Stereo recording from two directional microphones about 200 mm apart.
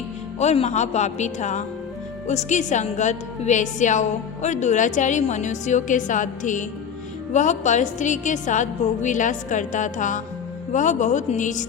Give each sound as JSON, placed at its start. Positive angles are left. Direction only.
{"t": 0.3, "sound": "a woman's voice", "side_deg": 35}